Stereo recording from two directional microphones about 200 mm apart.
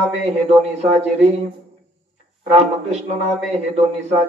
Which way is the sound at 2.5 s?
30° right (ahead or behind).